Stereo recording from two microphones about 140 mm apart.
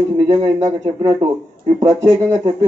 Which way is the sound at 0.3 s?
30° right (ahead or behind).